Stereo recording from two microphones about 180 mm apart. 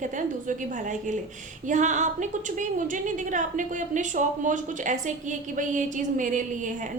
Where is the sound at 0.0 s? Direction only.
45° right (ahead or behind).